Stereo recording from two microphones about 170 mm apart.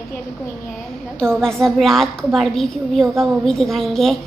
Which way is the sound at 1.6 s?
Centre (ahead or behind).